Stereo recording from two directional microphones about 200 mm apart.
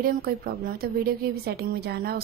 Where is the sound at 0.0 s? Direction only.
50° right (ahead or behind).